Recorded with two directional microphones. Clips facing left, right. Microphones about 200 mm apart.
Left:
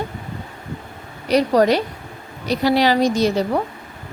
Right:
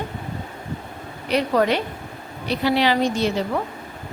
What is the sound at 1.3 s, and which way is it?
A woman's voice, 40° left (ahead or behind).